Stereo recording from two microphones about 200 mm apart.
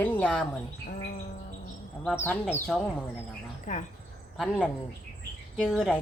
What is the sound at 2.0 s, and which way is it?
Speech, 10° left (ahead or behind).